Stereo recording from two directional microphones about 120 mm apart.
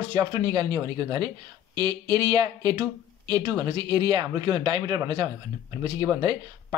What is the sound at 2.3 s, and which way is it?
Speech, 35° right (ahead or behind).